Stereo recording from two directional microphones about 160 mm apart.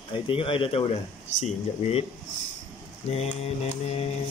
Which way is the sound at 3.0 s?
40° left (ahead or behind).